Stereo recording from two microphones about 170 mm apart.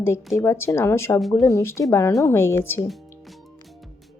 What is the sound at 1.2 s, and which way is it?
Speech, centre (ahead or behind).